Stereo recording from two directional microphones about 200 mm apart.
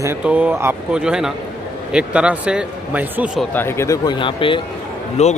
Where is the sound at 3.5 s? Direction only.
10° left (ahead or behind); by 5.4 s 35° left (ahead or behind).